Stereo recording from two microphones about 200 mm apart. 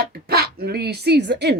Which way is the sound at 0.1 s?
50° right (ahead or behind).